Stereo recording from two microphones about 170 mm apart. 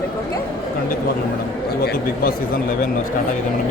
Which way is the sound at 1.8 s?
65° left (ahead or behind).